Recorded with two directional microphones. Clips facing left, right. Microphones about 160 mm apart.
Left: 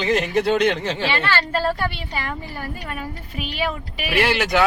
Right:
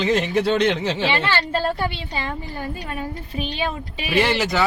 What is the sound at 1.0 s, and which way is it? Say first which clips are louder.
A woman's voice: right 1 dB; 15° right (ahead or behind).